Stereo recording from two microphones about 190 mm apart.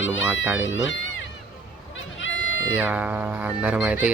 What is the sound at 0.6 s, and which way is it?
Speech, 80° left.